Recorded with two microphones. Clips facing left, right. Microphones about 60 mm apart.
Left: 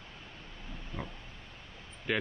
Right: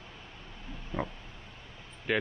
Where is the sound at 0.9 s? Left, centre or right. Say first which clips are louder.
Right 7 dB; centre.